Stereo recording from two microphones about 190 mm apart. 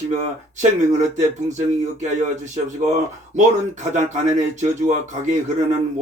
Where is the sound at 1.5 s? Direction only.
40° right (ahead or behind).